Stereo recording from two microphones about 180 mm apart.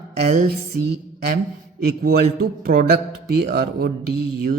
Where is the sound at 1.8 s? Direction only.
55° right (ahead or behind).